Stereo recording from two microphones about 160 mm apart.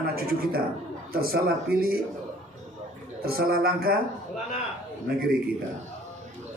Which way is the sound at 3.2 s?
70° right (ahead or behind).